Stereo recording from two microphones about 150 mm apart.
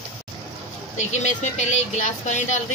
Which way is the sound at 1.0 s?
55° left (ahead or behind).